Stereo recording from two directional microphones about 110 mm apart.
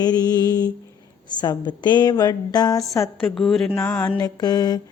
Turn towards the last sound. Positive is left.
turn(degrees=35)  # may be behind; listen again after turning